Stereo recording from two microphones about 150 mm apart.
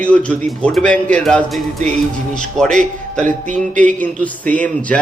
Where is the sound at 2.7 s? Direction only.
55° right (ahead or behind).